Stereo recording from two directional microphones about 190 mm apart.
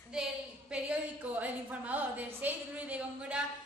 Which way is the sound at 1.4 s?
10° right (ahead or behind).